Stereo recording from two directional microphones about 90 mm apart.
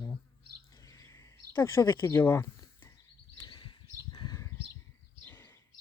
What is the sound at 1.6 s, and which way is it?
Speech, 40° left (ahead or behind).